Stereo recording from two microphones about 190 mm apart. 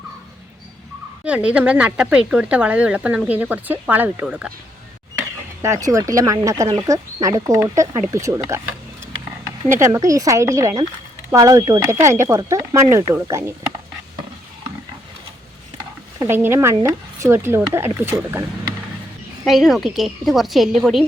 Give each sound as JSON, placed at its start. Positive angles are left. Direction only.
{"t": 1.2, "sound": "speech", "side_deg": -5}
{"t": 5.6, "sound": "speech", "side_deg": -15}
{"t": 9.9, "sound": "speech", "side_deg": -15}
{"t": 16.1, "sound": "speech", "side_deg": -15}
{"t": 19.5, "sound": "a woman's voice", "side_deg": 0}